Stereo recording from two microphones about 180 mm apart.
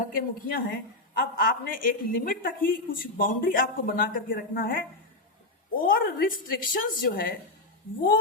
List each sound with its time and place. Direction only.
0.0 s speech: 50° left (ahead or behind)